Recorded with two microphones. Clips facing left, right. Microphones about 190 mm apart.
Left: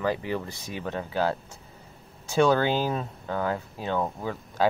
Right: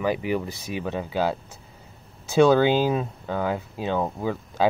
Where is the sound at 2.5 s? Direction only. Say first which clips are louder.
Right 5 dB; 15° right (ahead or behind).